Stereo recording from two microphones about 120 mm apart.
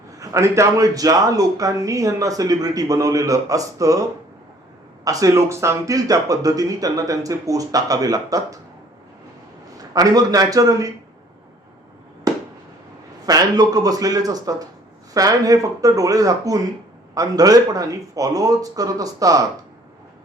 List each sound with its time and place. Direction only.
0.2 s speech: 25° right (ahead or behind)
5.0 s speech: 25° right (ahead or behind)
9.9 s speech: 30° right (ahead or behind)
13.2 s speech: 30° right (ahead or behind)